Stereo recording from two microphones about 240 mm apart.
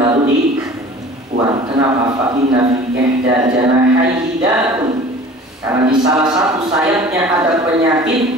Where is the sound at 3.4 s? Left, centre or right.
Centre.